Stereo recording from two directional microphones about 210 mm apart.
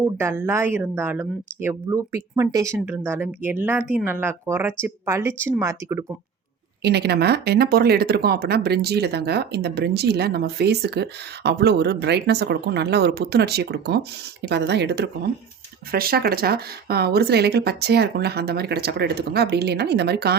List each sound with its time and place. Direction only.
0.0 s speech: 10° right (ahead or behind)
6.8 s speech: 50° right (ahead or behind)